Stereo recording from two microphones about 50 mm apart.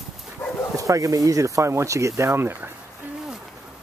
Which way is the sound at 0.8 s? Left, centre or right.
Right.